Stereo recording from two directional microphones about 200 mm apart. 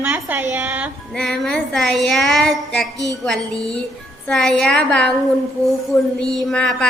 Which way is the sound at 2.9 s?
15° right (ahead or behind).